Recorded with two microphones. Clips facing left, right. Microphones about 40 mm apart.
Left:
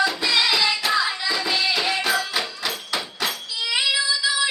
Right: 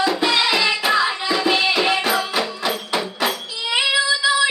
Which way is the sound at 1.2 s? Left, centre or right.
Right.